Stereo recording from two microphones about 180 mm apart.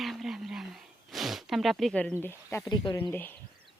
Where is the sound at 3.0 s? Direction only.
10° left (ahead or behind).